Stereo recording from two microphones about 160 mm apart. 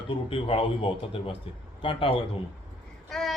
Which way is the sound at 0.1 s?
35° left (ahead or behind).